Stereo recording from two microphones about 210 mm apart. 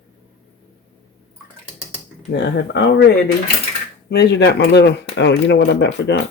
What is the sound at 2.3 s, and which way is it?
Speech, 55° left (ahead or behind).